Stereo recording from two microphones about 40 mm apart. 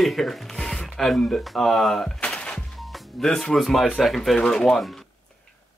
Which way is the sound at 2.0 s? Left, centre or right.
Left.